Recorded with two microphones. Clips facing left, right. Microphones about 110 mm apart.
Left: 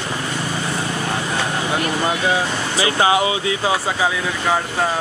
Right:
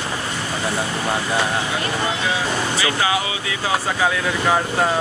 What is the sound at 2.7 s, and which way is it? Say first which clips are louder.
Speech: left 7 dB; 30° left (ahead or behind).